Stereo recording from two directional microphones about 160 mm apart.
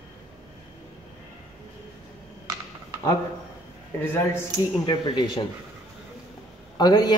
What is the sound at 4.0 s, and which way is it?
Speech, 15° left (ahead or behind).